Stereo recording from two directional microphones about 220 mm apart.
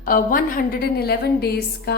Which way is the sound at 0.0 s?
40° left (ahead or behind).